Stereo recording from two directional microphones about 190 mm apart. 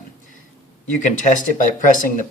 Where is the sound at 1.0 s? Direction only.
40° left (ahead or behind).